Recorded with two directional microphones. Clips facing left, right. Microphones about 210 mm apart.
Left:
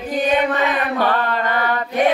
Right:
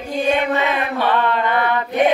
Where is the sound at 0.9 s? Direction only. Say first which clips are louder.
Right 3 dB; 40° left (ahead or behind).